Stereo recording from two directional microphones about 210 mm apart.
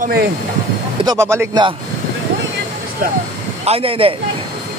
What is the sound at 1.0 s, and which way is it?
Speech, 10° right (ahead or behind).